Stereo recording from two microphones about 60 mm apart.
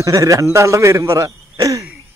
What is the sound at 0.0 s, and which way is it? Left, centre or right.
Speech, right.